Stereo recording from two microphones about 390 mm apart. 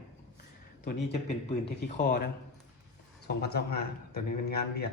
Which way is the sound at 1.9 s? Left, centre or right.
Left.